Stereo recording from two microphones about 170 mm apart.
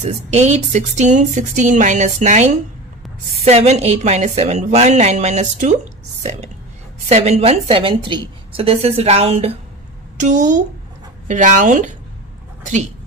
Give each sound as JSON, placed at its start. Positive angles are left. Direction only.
{"t": 0.0, "sound": "speech", "side_deg": -40}
{"t": 3.4, "sound": "a woman's voice", "side_deg": -40}
{"t": 7.1, "sound": "a woman's voice", "side_deg": -40}
{"t": 10.1, "sound": "a woman's voice", "side_deg": -50}